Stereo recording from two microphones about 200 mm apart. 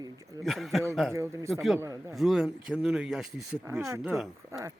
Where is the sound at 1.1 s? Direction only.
15° right (ahead or behind).